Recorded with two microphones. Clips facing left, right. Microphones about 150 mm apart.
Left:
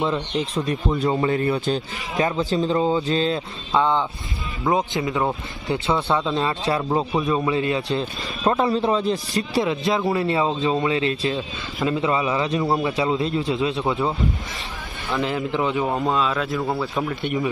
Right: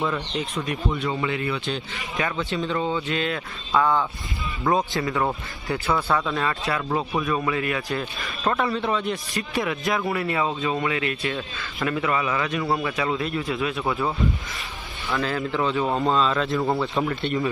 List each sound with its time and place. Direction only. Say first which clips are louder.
0.6 s a man's voice: left 4 dB; 35° left (ahead or behind); by 15.9 s 15° left (ahead or behind)
15.9 s speech: even; 5° left (ahead or behind)
17.2 s speech: left 1 dB; 15° left (ahead or behind)